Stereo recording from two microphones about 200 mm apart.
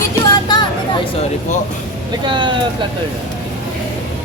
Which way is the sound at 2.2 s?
25° right (ahead or behind).